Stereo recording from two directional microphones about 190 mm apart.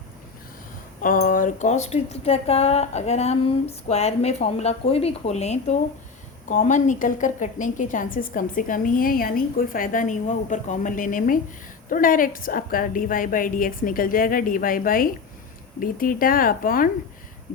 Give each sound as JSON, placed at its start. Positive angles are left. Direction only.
{"t": 1.0, "sound": "a woman's voice", "side_deg": 45}